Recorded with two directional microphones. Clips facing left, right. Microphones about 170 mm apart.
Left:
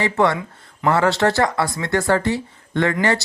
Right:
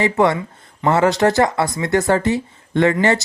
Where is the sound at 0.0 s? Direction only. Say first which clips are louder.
Right 2 dB; 20° right (ahead or behind).